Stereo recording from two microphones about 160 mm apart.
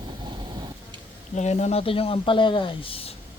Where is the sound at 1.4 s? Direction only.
45° left (ahead or behind).